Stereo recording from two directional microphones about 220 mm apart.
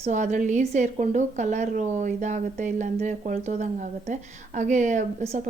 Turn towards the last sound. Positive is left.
turn(degrees=-30)  # may be behind; listen again after turning